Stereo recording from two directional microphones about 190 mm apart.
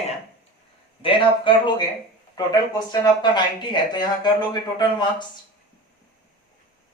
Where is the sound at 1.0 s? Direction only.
25° left (ahead or behind).